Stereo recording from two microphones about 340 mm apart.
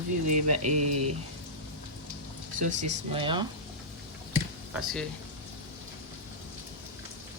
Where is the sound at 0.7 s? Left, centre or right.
Right.